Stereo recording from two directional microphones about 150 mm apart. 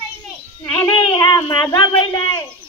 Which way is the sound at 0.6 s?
10° left (ahead or behind).